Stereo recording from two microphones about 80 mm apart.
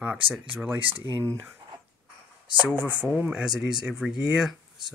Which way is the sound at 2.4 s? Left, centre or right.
Right.